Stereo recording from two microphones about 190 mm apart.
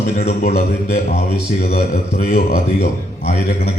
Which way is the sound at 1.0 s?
35° left (ahead or behind).